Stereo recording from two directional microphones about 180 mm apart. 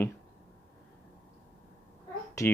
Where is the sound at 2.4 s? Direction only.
15° left (ahead or behind).